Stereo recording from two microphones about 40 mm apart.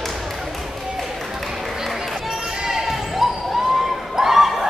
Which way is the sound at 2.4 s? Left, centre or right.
Centre.